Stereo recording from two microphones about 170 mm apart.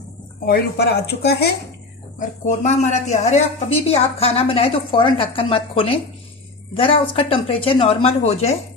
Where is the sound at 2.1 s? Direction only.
45° left (ahead or behind).